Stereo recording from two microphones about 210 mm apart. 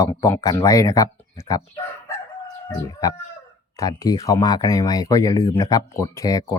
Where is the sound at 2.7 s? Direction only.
15° left (ahead or behind).